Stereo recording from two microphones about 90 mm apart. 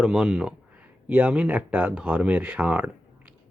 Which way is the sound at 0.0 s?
10° right (ahead or behind).